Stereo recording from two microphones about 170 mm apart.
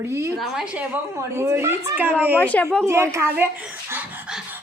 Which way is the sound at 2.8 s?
15° right (ahead or behind).